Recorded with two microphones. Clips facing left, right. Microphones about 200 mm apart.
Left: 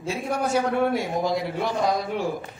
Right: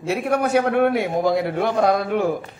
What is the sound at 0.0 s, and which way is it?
A man's voice, 65° right (ahead or behind).